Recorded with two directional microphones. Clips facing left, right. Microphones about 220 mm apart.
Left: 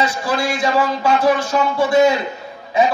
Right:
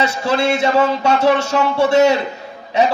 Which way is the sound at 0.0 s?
25° right (ahead or behind).